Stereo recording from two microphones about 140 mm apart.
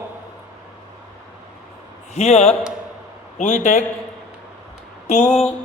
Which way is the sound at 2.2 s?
50° left (ahead or behind).